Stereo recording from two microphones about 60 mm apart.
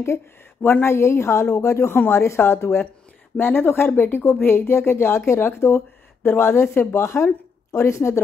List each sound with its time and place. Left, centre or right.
0.6 s a woman's voice: left